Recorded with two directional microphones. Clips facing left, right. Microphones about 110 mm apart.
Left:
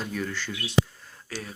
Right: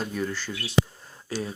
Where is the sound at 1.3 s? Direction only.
25° right (ahead or behind).